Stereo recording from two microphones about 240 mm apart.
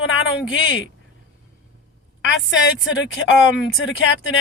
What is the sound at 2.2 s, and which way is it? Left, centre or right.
Speech, left.